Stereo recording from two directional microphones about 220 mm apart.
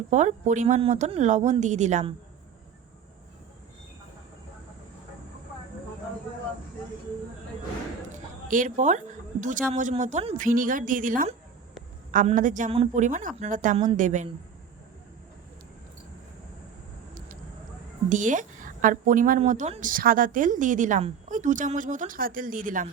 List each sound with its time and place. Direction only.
0.1 s speech: 35° right (ahead or behind)
8.4 s speech: 35° right (ahead or behind)
18.1 s speech: 35° right (ahead or behind)